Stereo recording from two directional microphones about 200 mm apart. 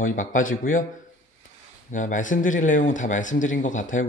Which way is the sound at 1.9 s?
40° left (ahead or behind).